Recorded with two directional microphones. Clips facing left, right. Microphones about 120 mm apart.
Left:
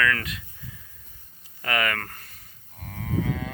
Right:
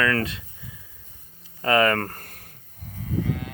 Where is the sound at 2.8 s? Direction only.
85° left.